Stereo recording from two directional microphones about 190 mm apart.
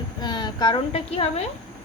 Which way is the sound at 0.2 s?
20° left (ahead or behind).